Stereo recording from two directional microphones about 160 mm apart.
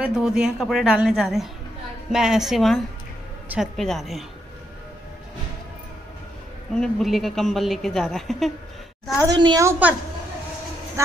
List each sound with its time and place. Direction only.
0.0 s a man's voice: 5° right (ahead or behind)
6.7 s a man's voice: centre (ahead or behind)
9.3 s a woman's voice: 25° right (ahead or behind)